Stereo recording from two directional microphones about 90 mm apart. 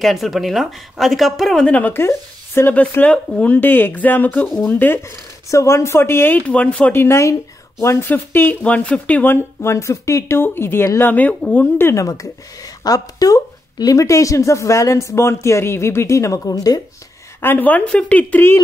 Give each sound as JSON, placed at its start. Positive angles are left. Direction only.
{"t": 0.0, "sound": "speech", "side_deg": 0}
{"t": 1.7, "sound": "speech", "side_deg": 20}
{"t": 3.1, "sound": "speech", "side_deg": 15}
{"t": 6.4, "sound": "speech", "side_deg": 15}
{"t": 7.0, "sound": "speech", "side_deg": 30}
{"t": 11.8, "sound": "speech", "side_deg": 35}
{"t": 12.1, "sound": "speech", "side_deg": 45}
{"t": 17.4, "sound": "speech", "side_deg": 20}